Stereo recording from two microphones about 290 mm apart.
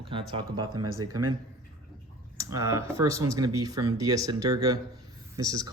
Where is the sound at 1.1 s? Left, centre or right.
Right.